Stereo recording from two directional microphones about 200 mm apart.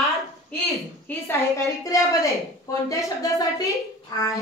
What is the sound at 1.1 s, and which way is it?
A woman's voice, 10° left (ahead or behind).